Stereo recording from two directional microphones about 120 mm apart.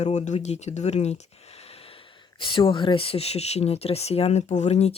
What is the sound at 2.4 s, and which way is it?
Speech, 45° left (ahead or behind).